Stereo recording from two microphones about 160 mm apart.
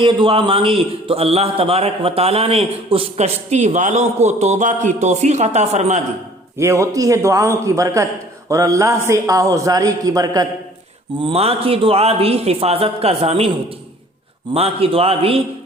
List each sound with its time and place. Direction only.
0.0 s a man's voice: 30° right (ahead or behind)
6.6 s a man's voice: 20° right (ahead or behind)
11.2 s a man's voice: 35° right (ahead or behind)
14.5 s a man's voice: 35° right (ahead or behind)